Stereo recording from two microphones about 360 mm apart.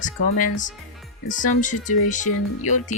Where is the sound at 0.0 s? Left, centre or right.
Left.